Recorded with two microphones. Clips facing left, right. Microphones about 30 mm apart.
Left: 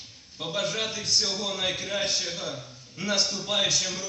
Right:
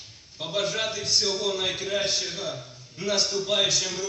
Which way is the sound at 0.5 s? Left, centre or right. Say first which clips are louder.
Right 2 dB; right.